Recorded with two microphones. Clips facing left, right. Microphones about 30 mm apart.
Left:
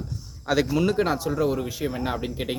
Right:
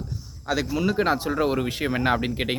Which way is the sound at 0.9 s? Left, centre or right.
Centre.